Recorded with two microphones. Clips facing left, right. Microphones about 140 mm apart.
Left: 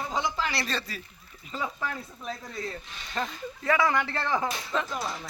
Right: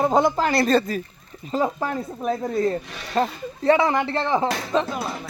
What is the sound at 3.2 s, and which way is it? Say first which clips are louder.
Speech: right 10 dB; 35° right (ahead or behind).